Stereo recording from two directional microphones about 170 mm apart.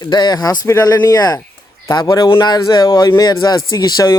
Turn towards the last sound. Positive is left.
turn(degrees=20)  # may be behind; listen again after turning